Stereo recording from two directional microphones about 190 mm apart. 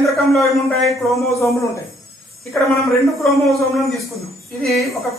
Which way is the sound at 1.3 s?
15° left (ahead or behind).